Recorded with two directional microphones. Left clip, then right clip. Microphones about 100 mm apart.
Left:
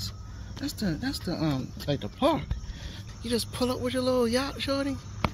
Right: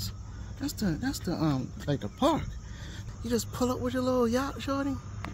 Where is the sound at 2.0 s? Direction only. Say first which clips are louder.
Left 1 dB; 5° right (ahead or behind).